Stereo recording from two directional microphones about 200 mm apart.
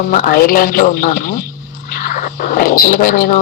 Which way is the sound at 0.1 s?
45° left (ahead or behind).